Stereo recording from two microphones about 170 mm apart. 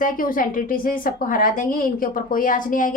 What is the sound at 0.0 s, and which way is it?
A woman's voice, 55° left (ahead or behind).